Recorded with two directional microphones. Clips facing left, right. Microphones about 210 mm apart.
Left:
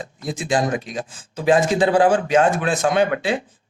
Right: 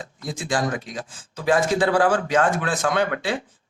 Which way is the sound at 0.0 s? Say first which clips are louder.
Left 4 dB; 20° left (ahead or behind).